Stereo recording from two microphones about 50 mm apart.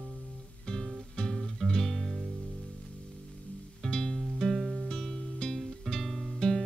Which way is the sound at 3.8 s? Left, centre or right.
Centre.